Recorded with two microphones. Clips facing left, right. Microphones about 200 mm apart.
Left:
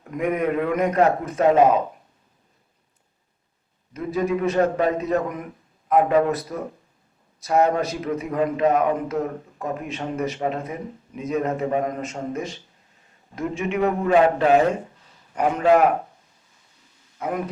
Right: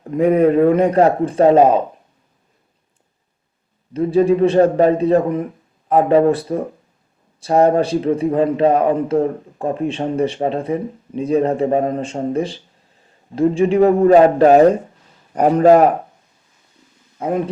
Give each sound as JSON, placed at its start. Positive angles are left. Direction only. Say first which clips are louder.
{"t": 0.0, "sound": "a man's voice", "louder": "right 10 dB", "side_deg": -30}
{"t": 3.9, "sound": "a man's voice", "louder": "right 9 dB", "side_deg": -30}
{"t": 17.2, "sound": "speech", "louder": "right 7 dB", "side_deg": -30}